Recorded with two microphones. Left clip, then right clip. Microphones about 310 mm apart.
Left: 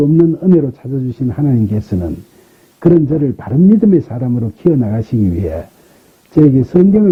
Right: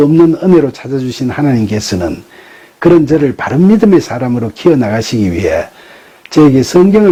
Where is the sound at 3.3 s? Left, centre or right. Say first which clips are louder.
Right 3 dB; centre.